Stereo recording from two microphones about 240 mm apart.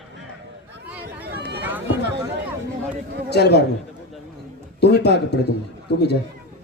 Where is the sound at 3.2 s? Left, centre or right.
Left.